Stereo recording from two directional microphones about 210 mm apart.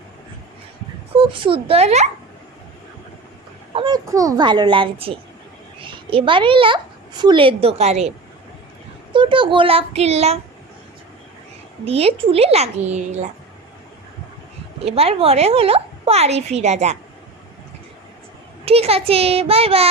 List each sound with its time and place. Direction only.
1.1 s a woman's voice: 25° right (ahead or behind)
3.8 s a woman's voice: 20° right (ahead or behind)
9.1 s a woman's voice: 25° right (ahead or behind)
11.9 s a woman's voice: 30° right (ahead or behind)
14.8 s a woman's voice: 30° right (ahead or behind)
18.6 s a woman's voice: 30° right (ahead or behind)